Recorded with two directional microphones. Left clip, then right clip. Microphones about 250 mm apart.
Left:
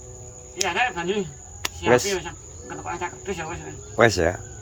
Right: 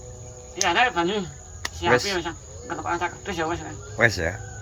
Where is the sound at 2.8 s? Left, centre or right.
Centre.